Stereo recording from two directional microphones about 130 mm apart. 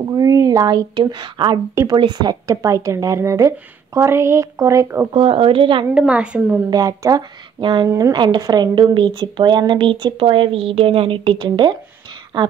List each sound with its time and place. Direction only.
0.0 s a woman's voice: 30° right (ahead or behind)
5.1 s speech: 45° right (ahead or behind)
5.9 s a woman's voice: 5° right (ahead or behind)
6.7 s speech: 25° right (ahead or behind)